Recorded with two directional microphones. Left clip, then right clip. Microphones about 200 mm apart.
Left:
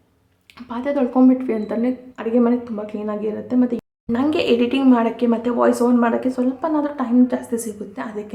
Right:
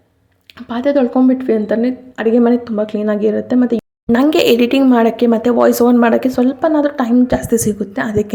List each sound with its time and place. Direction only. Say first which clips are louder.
0.7 s a woman's voice: right 7 dB; 25° right (ahead or behind)